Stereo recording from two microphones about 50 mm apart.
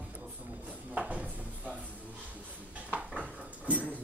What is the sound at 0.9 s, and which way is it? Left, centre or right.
Speech, right.